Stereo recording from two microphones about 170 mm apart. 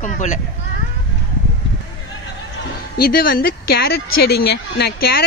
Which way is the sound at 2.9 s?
60° left (ahead or behind).